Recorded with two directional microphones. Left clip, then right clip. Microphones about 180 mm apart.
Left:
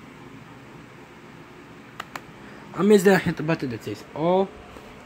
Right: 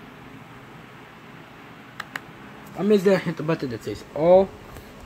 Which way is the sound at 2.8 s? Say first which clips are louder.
Left 2 dB; 30° left (ahead or behind).